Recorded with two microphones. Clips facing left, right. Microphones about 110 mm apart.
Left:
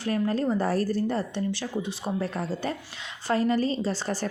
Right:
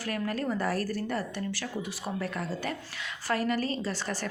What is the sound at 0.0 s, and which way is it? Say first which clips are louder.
A woman's voice: left 6 dB; 25° left (ahead or behind).